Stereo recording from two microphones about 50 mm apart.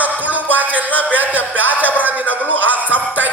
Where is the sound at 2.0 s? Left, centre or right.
Right.